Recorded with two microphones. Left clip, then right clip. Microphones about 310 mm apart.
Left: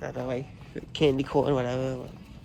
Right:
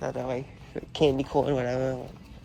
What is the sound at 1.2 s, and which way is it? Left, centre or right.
Speech, centre.